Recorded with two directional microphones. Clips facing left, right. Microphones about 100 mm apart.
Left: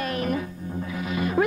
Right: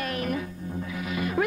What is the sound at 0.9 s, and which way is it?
Music, 30° left (ahead or behind).